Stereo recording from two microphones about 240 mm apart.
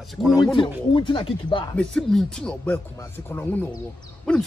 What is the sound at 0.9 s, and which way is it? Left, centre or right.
Speech, left.